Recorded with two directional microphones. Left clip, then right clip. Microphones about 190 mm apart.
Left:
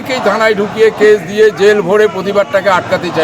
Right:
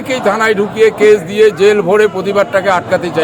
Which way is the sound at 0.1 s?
25° right (ahead or behind).